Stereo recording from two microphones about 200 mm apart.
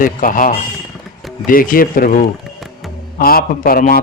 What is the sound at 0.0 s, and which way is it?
Speech, 45° left (ahead or behind).